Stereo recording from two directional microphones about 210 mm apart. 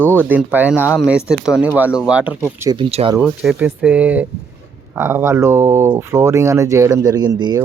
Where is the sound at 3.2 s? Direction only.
5° right (ahead or behind).